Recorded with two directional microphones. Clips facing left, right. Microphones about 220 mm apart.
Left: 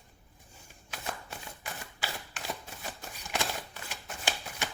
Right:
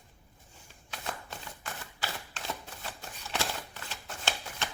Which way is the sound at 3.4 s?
15° left (ahead or behind).